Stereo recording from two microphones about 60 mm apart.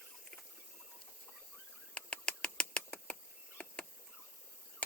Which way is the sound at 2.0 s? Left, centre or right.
Centre.